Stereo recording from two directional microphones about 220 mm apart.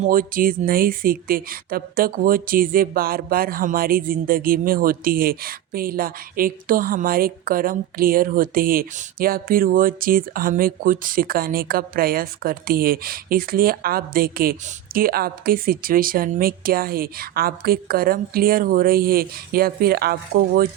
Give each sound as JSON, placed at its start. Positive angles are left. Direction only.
{"t": 0.0, "sound": "speech", "side_deg": -40}